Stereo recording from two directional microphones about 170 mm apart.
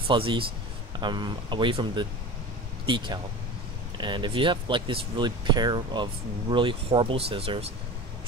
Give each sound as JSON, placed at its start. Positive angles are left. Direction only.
{"t": 0.1, "sound": "speech", "side_deg": -30}